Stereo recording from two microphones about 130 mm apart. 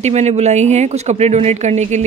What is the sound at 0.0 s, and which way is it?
A woman's voice, 55° right (ahead or behind).